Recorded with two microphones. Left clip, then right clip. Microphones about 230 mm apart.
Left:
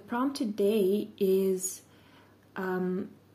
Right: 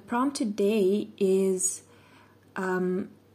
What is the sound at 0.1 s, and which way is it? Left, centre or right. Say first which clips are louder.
Speech: right 3 dB; centre.